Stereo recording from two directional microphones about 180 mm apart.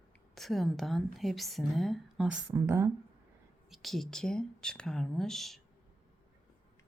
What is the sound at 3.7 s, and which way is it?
A woman's voice, centre (ahead or behind).